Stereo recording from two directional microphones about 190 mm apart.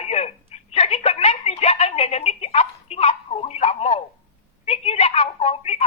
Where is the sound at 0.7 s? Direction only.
30° left (ahead or behind).